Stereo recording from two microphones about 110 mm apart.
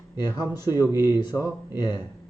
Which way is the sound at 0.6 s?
35° left (ahead or behind).